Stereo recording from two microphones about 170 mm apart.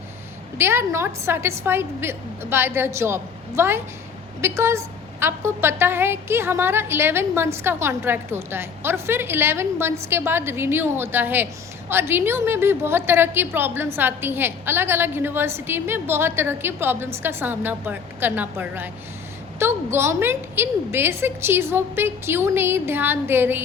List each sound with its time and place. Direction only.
0.6 s a woman's voice: 15° right (ahead or behind)